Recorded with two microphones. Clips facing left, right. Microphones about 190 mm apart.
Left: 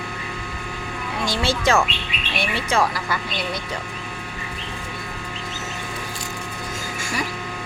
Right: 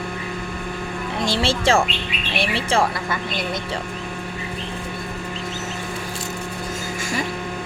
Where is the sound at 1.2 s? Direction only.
25° right (ahead or behind).